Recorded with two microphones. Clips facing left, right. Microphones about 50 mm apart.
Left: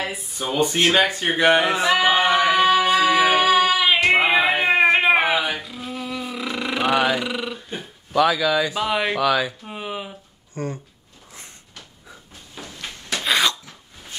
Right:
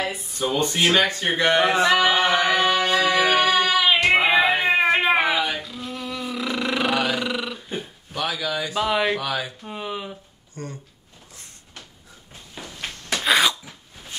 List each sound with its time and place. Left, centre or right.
0.0 s speech: centre
1.7 s music: centre
4.1 s cat: centre
8.7 s speech: centre
9.2 s speech: left
9.6 s a sound: centre
10.5 s speech: left
12.6 s a sound: centre
13.1 s cough: centre